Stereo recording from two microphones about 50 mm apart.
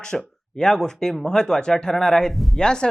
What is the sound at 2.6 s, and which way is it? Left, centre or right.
Speech, centre.